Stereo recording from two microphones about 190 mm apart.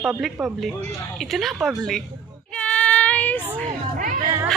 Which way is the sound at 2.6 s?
5° left (ahead or behind).